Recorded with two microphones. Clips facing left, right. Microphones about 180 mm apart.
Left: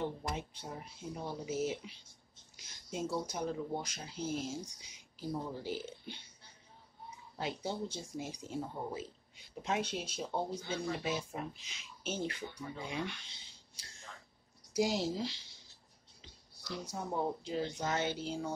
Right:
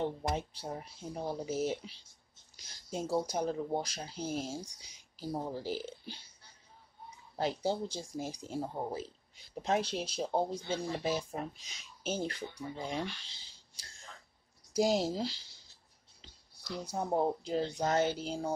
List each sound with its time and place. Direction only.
0.0 s speech: 35° right (ahead or behind)
7.3 s speech: 35° right (ahead or behind)
16.8 s speech: 35° right (ahead or behind)